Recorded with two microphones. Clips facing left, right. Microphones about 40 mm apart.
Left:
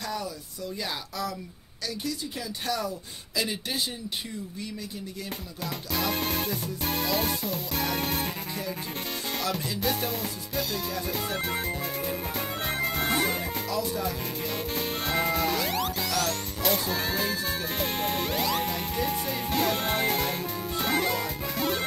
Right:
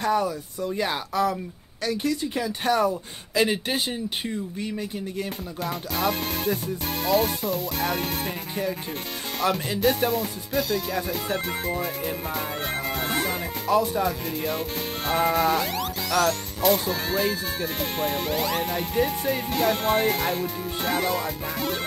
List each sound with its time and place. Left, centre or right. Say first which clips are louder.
0.0 s speech: right 10 dB; right
5.6 s speech: right 4 dB; centre
9.4 s speech: right 8 dB; right
9.8 s speech: right 7 dB; centre
11.2 s music: right 3 dB; centre
13.7 s speech: right 10 dB; right
14.0 s speech: right 5 dB; centre